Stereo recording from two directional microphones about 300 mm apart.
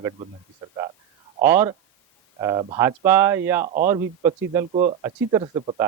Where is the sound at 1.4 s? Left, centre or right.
Centre.